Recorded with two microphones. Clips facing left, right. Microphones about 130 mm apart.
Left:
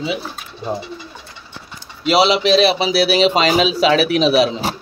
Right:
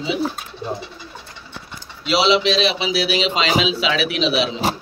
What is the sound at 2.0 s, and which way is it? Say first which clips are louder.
Speech: left 3 dB; 45° left (ahead or behind).